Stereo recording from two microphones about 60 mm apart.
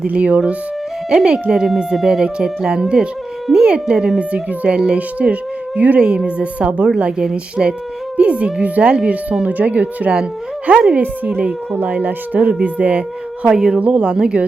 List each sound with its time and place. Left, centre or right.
0.1 s speech: right
6.0 s speech: centre
13.7 s speech: right